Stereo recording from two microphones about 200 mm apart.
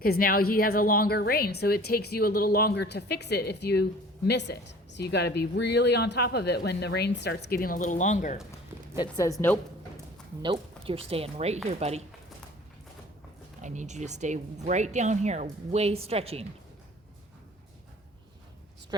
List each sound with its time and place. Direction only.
0.0 s a woman's voice: 45° left (ahead or behind)
9.0 s a woman's voice: 15° left (ahead or behind)
10.4 s speech: 25° right (ahead or behind)
13.6 s speech: 35° right (ahead or behind)